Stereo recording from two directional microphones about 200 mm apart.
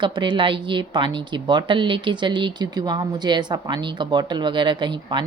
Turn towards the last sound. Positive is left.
turn(degrees=-25)  # may be behind; listen again after turning